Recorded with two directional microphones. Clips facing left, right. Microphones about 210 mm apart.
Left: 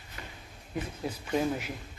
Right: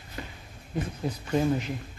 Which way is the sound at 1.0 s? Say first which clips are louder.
Right 4 dB; 10° left (ahead or behind).